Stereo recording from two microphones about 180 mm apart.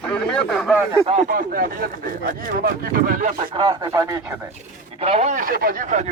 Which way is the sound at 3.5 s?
25° right (ahead or behind).